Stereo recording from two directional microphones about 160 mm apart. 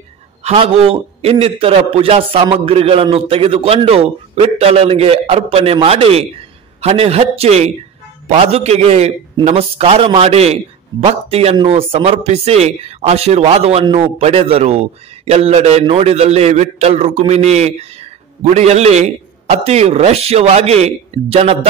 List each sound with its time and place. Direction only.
0.4 s a man's voice: 40° right (ahead or behind)